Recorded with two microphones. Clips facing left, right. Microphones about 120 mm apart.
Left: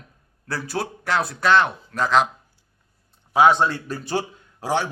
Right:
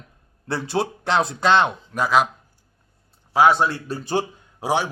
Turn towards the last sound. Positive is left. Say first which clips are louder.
# right 1 dB
turn(degrees=-15)  # may be behind; listen again after turning